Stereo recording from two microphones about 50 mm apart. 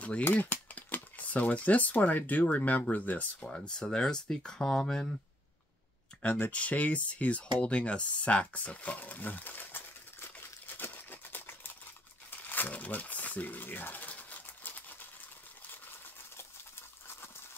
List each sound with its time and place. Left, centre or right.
0.2 s speech: left
3.4 s speech: centre
6.2 s speech: left
6.5 s a sound: left
12.3 s crumpling: left